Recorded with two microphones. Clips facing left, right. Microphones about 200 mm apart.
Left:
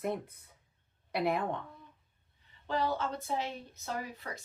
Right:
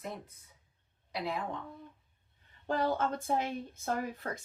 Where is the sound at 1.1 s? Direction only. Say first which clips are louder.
Left 5 dB; 60° left (ahead or behind).